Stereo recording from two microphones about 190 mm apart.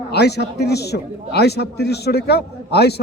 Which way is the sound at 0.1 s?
60° left (ahead or behind).